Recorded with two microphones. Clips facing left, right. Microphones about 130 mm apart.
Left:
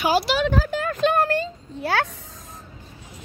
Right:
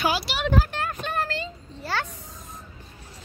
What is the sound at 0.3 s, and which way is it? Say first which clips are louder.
Speech: left 9 dB; 90° left.